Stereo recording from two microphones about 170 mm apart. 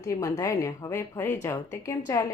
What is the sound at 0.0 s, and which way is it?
Speech, 20° left (ahead or behind).